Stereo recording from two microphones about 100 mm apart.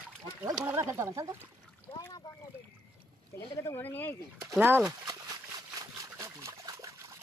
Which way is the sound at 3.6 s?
20° left (ahead or behind).